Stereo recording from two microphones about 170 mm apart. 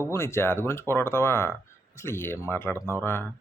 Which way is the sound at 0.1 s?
15° left (ahead or behind).